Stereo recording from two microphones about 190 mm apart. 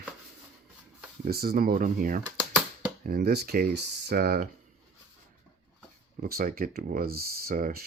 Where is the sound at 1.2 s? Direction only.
50° right (ahead or behind).